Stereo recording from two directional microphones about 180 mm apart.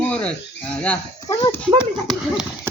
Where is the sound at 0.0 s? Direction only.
5° left (ahead or behind).